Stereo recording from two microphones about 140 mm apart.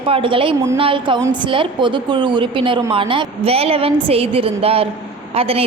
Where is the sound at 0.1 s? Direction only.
40° right (ahead or behind).